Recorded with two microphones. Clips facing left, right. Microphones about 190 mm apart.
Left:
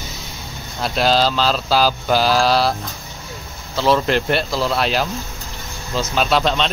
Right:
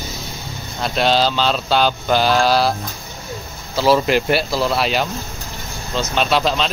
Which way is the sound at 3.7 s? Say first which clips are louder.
Right 2 dB; 5° right (ahead or behind).